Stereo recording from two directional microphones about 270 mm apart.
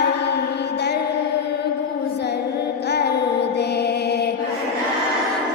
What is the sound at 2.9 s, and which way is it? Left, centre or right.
Music, left.